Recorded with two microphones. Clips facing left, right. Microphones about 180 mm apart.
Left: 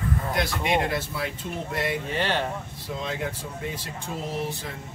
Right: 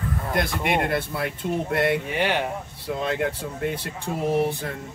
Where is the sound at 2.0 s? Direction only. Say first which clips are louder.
Right 2 dB; 15° right (ahead or behind).